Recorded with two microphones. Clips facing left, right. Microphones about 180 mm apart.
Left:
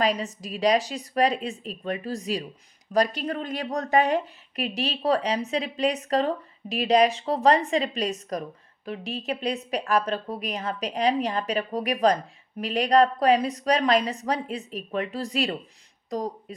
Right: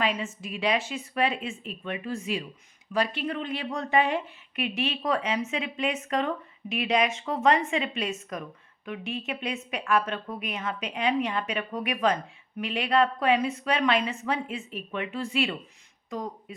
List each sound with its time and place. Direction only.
0.0 s speech: 40° left (ahead or behind)